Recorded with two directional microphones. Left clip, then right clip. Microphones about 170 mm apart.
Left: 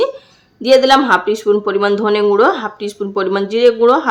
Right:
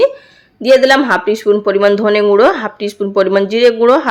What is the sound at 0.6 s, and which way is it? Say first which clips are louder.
Speech: right 1 dB; 10° right (ahead or behind).